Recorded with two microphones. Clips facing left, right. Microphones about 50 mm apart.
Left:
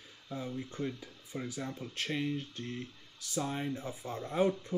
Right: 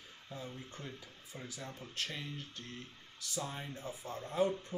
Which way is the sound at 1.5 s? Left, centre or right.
Left.